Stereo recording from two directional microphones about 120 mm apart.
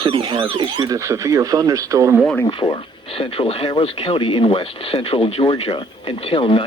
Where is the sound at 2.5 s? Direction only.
45° left (ahead or behind).